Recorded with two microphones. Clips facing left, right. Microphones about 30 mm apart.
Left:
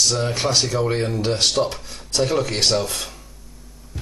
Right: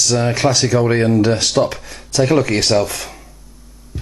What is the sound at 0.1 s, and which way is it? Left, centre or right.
Speech, right.